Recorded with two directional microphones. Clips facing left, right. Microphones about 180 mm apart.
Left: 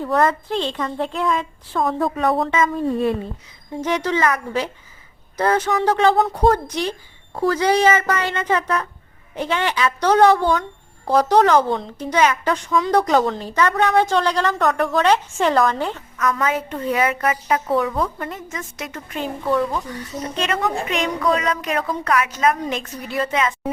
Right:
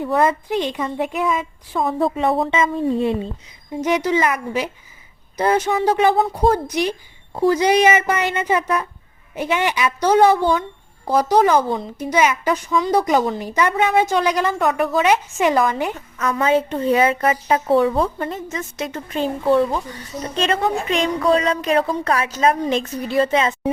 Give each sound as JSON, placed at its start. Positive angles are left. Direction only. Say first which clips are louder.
{"t": 0.2, "sound": "a woman's voice", "louder": "right 1 dB", "side_deg": -15}
{"t": 2.5, "sound": "a woman's voice", "louder": "even", "side_deg": -25}
{"t": 3.8, "sound": "a woman's voice", "louder": "right 2 dB", "side_deg": -10}
{"t": 6.4, "sound": "a woman's voice", "louder": "left 1 dB", "side_deg": 0}
{"t": 7.3, "sound": "a woman's voice", "louder": "right 2 dB", "side_deg": -15}
{"t": 14.6, "sound": "a woman's voice", "louder": "even", "side_deg": -5}
{"t": 16.1, "sound": "a woman's voice", "louder": "right 4 dB", "side_deg": -25}